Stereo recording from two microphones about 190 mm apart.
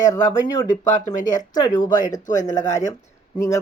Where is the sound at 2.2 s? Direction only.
40° left (ahead or behind).